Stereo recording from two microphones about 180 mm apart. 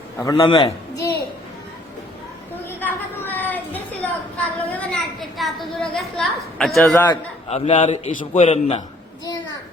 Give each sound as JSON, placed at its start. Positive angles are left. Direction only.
{"t": 0.3, "sound": "a man's voice", "side_deg": 30}
{"t": 2.6, "sound": "a sound", "side_deg": 10}
{"t": 5.4, "sound": "a woman's voice", "side_deg": 0}
{"t": 7.1, "sound": "a man's voice", "side_deg": 35}
{"t": 8.4, "sound": "a man's voice", "side_deg": 35}